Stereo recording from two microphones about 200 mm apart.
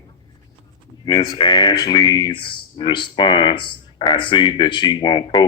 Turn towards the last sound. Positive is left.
turn(degrees=20)  # may be behind; listen again after turning